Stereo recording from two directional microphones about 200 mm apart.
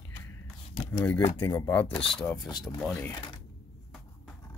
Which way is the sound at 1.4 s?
20° left (ahead or behind).